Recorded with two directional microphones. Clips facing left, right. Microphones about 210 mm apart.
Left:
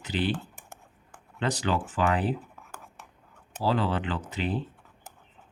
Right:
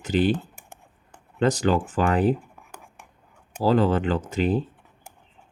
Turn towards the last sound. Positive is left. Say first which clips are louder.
# right 7 dB
turn(degrees=-45)  # may be behind; listen again after turning